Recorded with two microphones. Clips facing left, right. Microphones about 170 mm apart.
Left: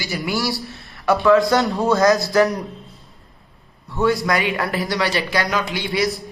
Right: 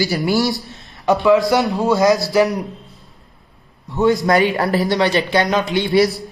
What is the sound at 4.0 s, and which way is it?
Speech, 20° right (ahead or behind).